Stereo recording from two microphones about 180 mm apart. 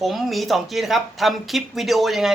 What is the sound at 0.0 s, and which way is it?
Speech, centre (ahead or behind).